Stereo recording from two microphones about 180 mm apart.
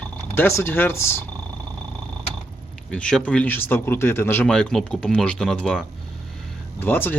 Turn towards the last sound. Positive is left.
turn(degrees=10)  # may be behind; listen again after turning